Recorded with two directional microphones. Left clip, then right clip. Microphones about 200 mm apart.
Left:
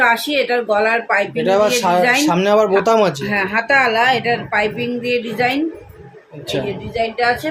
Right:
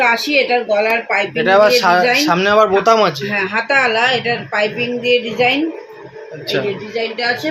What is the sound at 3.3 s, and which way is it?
Speech, 50° left (ahead or behind).